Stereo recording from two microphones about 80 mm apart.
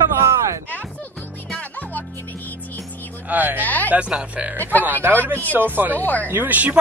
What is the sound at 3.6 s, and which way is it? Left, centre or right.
Speech, left.